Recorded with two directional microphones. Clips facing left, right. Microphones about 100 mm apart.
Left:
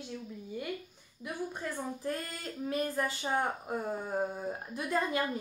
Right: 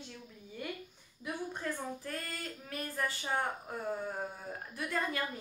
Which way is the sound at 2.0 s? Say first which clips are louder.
Left 4 dB; 20° left (ahead or behind).